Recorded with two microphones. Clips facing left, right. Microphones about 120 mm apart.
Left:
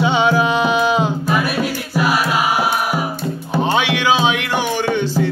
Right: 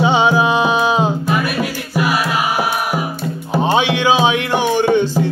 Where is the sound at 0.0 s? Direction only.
20° right (ahead or behind).